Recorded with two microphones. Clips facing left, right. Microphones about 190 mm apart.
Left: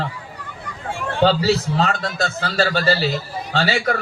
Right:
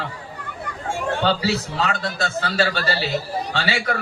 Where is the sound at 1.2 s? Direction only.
40° left (ahead or behind).